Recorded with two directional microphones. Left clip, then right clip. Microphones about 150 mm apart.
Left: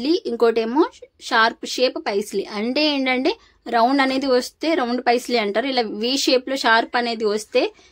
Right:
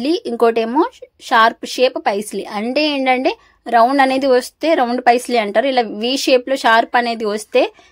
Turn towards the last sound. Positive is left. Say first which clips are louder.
# right 4 dB
turn(degrees=-40)  # may be behind; listen again after turning